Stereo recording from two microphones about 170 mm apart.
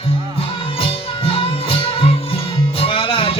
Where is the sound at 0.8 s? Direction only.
35° left (ahead or behind).